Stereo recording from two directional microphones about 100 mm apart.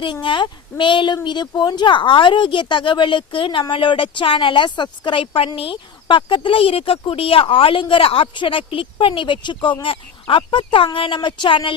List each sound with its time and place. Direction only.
0.0 s speech: 50° left (ahead or behind)